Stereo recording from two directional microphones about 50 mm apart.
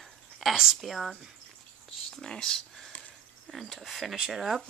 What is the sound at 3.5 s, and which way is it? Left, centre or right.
Speech, centre.